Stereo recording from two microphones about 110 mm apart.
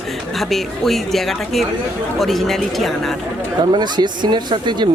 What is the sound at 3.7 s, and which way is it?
Speech, 45° right (ahead or behind).